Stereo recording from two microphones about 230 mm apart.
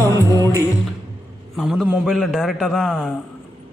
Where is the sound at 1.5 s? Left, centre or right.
Centre.